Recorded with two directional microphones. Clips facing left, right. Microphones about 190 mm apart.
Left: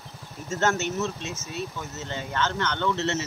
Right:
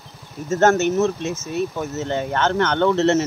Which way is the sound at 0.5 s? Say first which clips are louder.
Right 9 dB; 45° right (ahead or behind).